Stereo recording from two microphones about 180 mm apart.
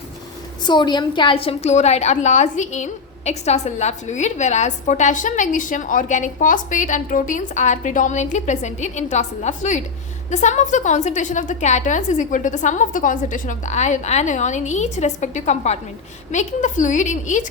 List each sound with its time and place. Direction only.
0.6 s a woman's voice: 25° left (ahead or behind); by 17.4 s 45° left (ahead or behind)